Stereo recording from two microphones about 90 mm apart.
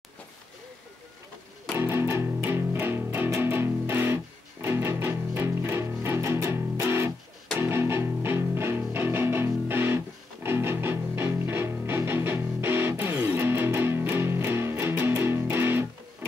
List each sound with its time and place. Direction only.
1.8 s music: 25° right (ahead or behind)